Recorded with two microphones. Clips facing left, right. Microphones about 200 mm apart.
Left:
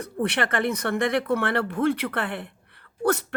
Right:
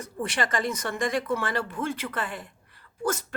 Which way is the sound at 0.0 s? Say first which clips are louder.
Left 4 dB; 60° left (ahead or behind).